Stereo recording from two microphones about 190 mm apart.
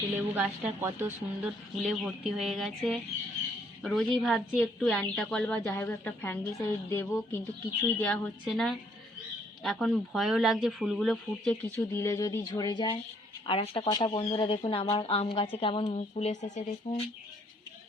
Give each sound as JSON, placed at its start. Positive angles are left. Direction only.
{"t": 0.3, "sound": "a woman's voice", "side_deg": -10}
{"t": 11.9, "sound": "speech", "side_deg": 15}